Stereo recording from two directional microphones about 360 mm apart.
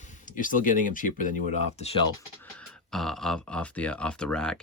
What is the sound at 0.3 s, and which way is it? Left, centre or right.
Speech, left.